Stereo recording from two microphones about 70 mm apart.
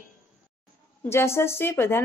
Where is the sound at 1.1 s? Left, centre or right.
Left.